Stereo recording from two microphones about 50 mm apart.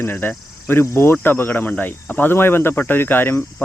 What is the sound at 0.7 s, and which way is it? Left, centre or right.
Speech, left.